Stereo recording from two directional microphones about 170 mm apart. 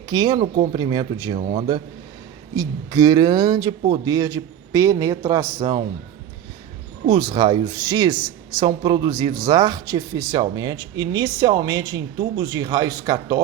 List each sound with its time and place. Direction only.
0.1 s speech: 25° right (ahead or behind)
7.1 s speech: 30° right (ahead or behind)